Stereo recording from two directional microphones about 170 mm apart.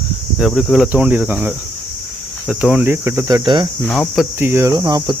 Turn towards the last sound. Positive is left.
turn(degrees=-25)  # may be behind; listen again after turning